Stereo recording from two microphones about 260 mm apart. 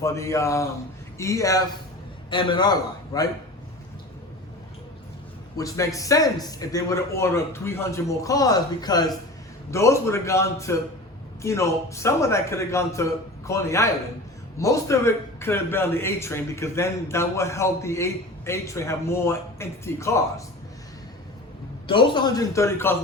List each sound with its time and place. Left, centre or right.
0.0 s a man's voice: centre
5.5 s a man's voice: centre
21.8 s a man's voice: centre